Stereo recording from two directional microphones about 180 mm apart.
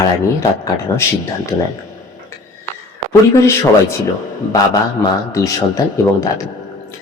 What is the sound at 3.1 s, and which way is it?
Speech, 15° left (ahead or behind).